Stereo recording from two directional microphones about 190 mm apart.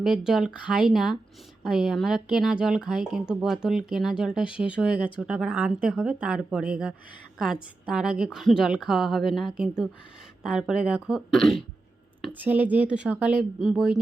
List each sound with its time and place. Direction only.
0.0 s a woman's voice: 5° right (ahead or behind)